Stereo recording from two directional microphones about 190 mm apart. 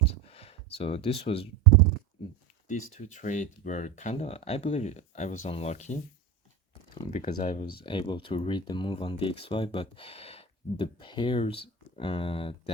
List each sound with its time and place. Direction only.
0.0 s a sound: 30° left (ahead or behind)
2.6 s speech: 40° left (ahead or behind)
7.1 s speech: 40° left (ahead or behind)
7.9 s speech: 25° left (ahead or behind)